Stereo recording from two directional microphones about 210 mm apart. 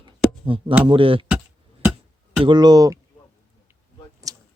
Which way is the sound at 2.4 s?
20° right (ahead or behind).